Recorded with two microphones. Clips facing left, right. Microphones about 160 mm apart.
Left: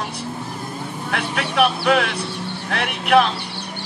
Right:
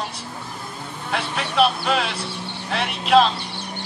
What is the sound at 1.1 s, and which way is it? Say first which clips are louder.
Speech: left 1 dB; 60° left (ahead or behind).